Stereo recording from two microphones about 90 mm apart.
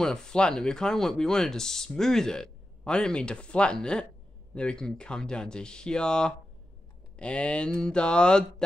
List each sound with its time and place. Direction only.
0.0 s speech: 5° left (ahead or behind)